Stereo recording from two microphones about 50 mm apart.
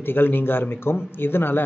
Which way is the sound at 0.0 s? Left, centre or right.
Left.